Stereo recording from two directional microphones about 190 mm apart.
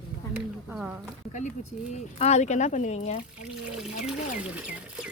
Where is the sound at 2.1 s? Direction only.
35° left (ahead or behind).